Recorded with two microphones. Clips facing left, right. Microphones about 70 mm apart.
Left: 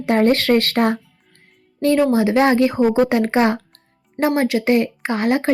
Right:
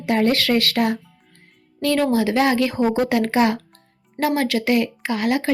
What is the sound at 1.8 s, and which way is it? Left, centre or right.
A woman's voice, left.